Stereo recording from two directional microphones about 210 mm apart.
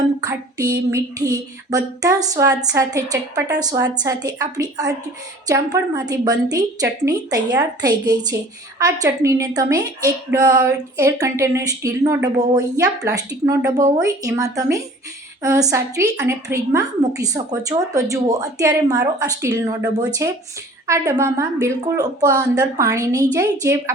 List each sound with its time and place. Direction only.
0.3 s a woman's voice: 15° right (ahead or behind)